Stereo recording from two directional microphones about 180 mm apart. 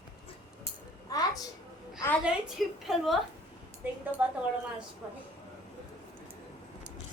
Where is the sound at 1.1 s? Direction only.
20° left (ahead or behind).